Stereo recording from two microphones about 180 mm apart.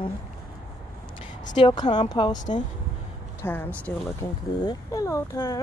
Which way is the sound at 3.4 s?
10° left (ahead or behind).